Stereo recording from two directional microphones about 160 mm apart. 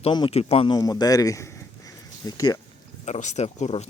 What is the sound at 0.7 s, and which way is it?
Speech, 25° left (ahead or behind).